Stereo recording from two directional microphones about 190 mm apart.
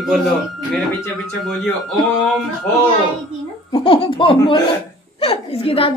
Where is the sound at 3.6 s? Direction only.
25° left (ahead or behind).